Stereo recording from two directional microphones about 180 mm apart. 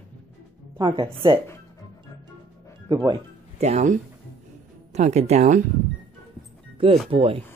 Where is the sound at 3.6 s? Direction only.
40° right (ahead or behind).